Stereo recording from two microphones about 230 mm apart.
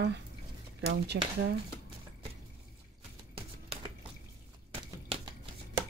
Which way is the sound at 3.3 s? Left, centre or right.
Right.